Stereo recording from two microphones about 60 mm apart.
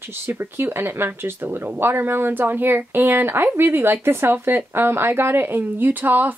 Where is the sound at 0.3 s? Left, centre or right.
Right.